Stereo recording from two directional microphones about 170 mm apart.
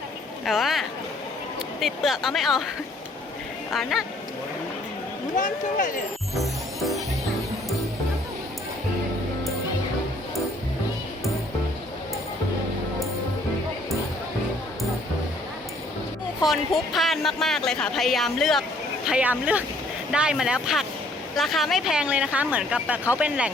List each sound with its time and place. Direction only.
0.4 s speech: centre (ahead or behind)
3.7 s speech: centre (ahead or behind)
5.4 s speech: 50° left (ahead or behind)
6.3 s music: centre (ahead or behind)
16.4 s speech: centre (ahead or behind)